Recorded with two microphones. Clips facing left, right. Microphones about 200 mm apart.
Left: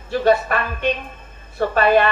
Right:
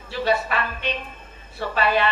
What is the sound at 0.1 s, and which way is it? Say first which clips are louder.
A woman's voice: left 6 dB; 50° left (ahead or behind).